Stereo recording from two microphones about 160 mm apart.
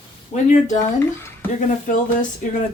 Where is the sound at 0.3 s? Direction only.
45° left (ahead or behind).